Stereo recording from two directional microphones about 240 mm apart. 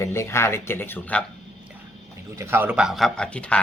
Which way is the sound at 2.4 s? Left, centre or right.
Centre.